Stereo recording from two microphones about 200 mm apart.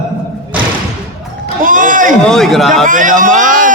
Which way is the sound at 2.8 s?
40° right (ahead or behind).